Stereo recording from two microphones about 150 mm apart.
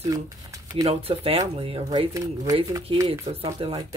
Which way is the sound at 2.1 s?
20° right (ahead or behind).